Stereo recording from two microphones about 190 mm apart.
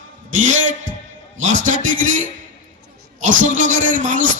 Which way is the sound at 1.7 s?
40° right (ahead or behind).